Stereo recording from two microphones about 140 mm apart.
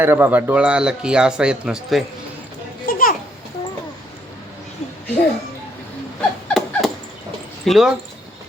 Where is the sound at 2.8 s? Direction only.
90° left.